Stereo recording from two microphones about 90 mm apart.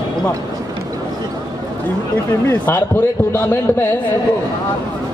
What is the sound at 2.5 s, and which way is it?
A man's voice, 30° left (ahead or behind).